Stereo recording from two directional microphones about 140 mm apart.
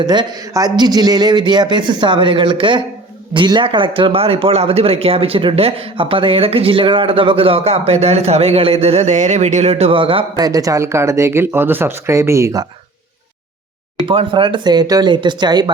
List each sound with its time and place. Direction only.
0.0 s a man's voice: 30° right (ahead or behind)
10.4 s speech: 25° right (ahead or behind)
14.0 s a man's voice: 40° right (ahead or behind)